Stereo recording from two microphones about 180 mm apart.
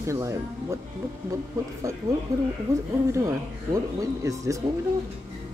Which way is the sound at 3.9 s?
15° right (ahead or behind).